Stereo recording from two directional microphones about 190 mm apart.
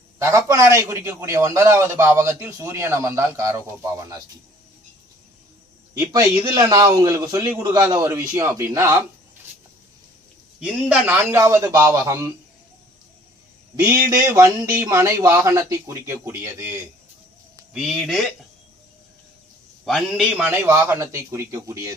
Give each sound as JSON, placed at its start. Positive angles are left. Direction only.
{"t": 0.2, "sound": "a man's voice", "side_deg": -15}
{"t": 5.9, "sound": "a man's voice", "side_deg": -15}
{"t": 10.6, "sound": "a man's voice", "side_deg": -5}
{"t": 13.7, "sound": "a man's voice", "side_deg": -10}
{"t": 17.7, "sound": "speech", "side_deg": 0}
{"t": 19.8, "sound": "a man's voice", "side_deg": 0}